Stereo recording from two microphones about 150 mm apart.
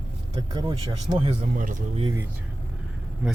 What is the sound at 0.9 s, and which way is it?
Speech, 40° right (ahead or behind).